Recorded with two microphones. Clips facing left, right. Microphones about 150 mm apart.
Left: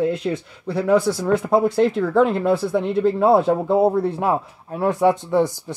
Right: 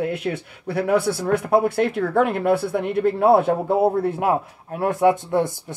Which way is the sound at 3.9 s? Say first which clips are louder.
Even; 50° right (ahead or behind).